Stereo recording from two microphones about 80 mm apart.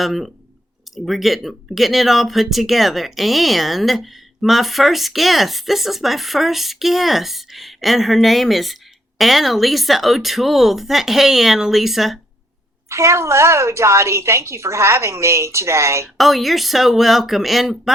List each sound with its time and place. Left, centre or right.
0.0 s speech: centre
12.9 s a woman's voice: right
16.1 s speech: centre